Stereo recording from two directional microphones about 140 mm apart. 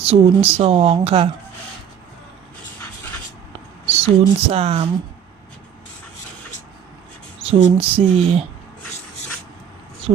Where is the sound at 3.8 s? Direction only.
45° right (ahead or behind).